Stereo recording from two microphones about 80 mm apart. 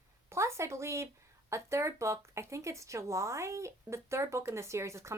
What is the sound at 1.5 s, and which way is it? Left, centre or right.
A woman's voice, right.